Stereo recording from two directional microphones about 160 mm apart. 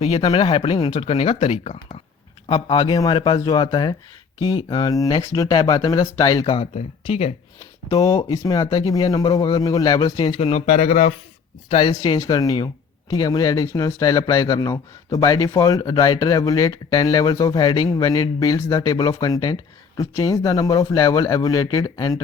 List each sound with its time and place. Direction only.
0.0 s speech: 40° left (ahead or behind)
2.5 s speech: 30° left (ahead or behind)
7.9 s speech: 25° left (ahead or behind)
10.7 s speech: 45° left (ahead or behind)
11.7 s speech: 35° left (ahead or behind)